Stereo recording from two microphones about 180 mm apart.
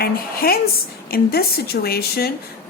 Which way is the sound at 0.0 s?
60° left (ahead or behind).